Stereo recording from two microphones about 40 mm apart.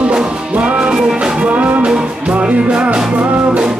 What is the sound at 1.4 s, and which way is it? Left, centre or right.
Music, right.